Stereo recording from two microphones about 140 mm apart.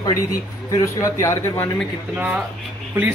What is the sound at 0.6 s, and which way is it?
Speech, 25° left (ahead or behind).